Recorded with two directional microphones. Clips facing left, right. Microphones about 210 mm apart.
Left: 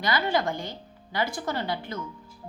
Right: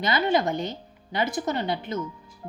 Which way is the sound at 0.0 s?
20° right (ahead or behind).